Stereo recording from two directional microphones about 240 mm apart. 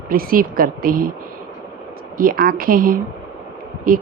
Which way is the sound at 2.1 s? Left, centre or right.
Right.